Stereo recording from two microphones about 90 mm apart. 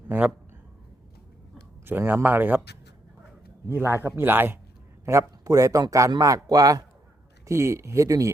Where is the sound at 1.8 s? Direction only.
25° right (ahead or behind).